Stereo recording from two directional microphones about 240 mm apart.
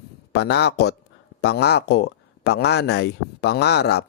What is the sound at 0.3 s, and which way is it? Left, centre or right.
Speech, left.